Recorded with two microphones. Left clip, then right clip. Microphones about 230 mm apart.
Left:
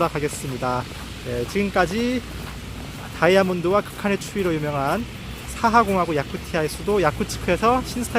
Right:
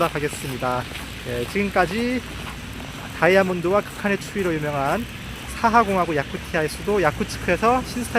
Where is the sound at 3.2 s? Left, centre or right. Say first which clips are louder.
Even; centre.